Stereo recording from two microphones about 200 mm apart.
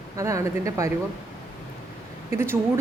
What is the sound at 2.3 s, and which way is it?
Speech, 10° right (ahead or behind).